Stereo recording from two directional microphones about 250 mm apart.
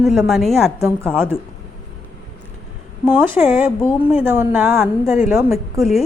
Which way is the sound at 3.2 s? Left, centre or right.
Centre.